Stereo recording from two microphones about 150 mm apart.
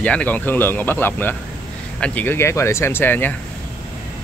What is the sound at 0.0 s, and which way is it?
Speech, 10° left (ahead or behind).